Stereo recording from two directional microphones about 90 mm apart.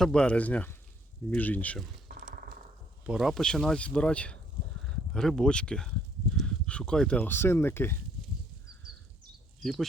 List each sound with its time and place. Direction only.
0.0 s speech: 10° left (ahead or behind)
3.1 s speech: centre (ahead or behind)
6.4 s a sound: 10° left (ahead or behind)
7.2 s speech: 25° left (ahead or behind)
9.6 s speech: centre (ahead or behind)